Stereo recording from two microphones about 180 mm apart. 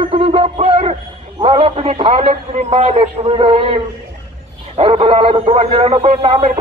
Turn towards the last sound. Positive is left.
turn(degrees=-35)  # may be behind; listen again after turning